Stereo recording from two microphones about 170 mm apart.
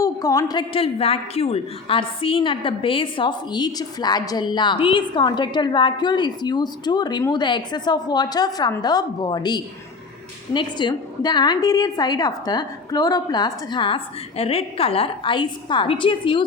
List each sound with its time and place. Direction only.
0.0 s a woman's voice: 20° left (ahead or behind)